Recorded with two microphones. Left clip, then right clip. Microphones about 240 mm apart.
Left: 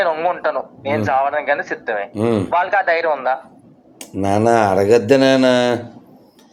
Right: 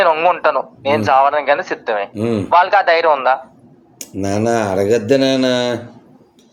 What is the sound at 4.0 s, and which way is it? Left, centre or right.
A man's voice, centre.